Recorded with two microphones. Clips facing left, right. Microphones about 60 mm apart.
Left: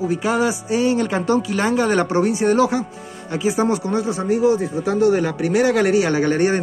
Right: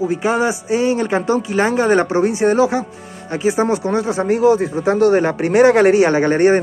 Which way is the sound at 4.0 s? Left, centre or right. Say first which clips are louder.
Right 4 dB; right.